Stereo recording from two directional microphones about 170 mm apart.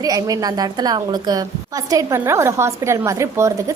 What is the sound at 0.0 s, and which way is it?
A woman's voice, 20° right (ahead or behind).